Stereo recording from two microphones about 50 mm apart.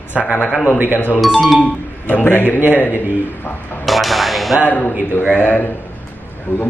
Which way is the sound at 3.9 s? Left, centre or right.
Centre.